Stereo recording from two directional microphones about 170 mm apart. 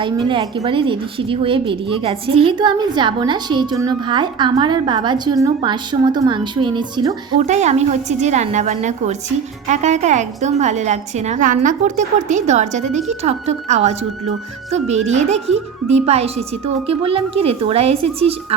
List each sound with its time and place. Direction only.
0.0 s a woman's voice: 30° right (ahead or behind)
7.3 s a woman's voice: 40° right (ahead or behind)